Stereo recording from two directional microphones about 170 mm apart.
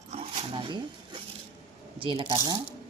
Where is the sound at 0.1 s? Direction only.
45° right (ahead or behind).